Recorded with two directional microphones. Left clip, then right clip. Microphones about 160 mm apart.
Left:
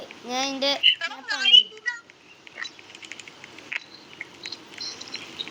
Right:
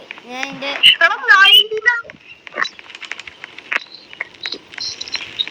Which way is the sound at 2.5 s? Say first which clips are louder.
Right 14 dB; 50° right (ahead or behind).